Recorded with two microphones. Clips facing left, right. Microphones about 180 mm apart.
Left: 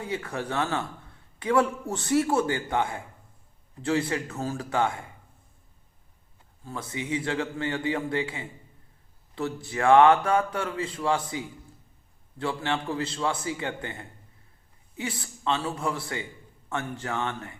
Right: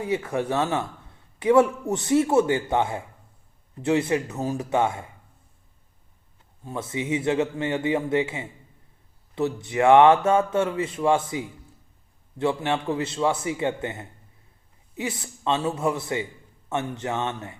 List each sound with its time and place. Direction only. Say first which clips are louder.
0.0 s a man's voice: right 6 dB; 25° right (ahead or behind)
6.7 s a man's voice: right 4 dB; 25° right (ahead or behind)
9.6 s a man's voice: right 3 dB; 20° right (ahead or behind)